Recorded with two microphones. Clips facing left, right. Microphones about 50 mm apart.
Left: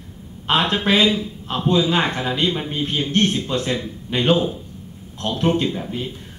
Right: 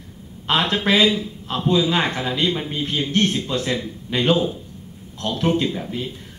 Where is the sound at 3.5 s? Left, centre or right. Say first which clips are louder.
Left 1 dB; left.